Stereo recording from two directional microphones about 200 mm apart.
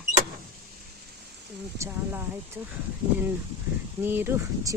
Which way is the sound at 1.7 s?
15° right (ahead or behind).